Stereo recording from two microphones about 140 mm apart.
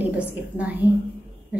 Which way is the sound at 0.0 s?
10° right (ahead or behind).